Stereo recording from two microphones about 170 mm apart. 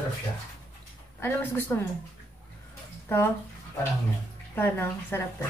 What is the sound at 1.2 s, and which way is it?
Speech, 15° left (ahead or behind).